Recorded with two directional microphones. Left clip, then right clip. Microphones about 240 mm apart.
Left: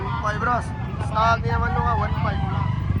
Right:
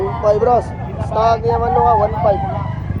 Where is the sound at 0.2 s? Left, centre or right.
Centre.